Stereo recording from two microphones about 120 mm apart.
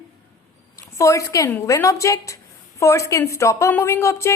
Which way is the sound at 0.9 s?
25° left (ahead or behind).